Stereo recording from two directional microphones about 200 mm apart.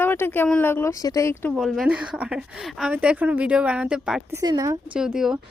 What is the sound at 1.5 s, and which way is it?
Speech, centre (ahead or behind).